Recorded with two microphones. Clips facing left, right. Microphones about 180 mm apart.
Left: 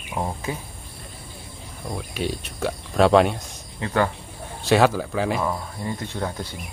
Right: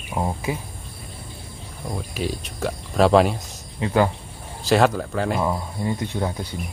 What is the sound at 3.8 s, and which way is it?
Speech, 15° right (ahead or behind).